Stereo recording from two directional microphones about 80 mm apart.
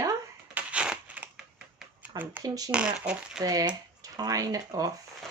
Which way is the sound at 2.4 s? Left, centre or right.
Right.